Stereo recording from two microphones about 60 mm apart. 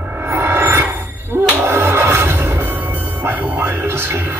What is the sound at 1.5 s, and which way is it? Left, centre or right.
Music, right.